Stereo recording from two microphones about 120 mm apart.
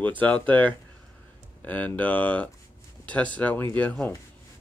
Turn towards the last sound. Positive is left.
turn(degrees=10)  # may be behind; listen again after turning